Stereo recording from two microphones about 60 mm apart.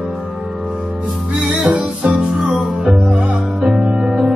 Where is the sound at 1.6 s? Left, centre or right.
Right.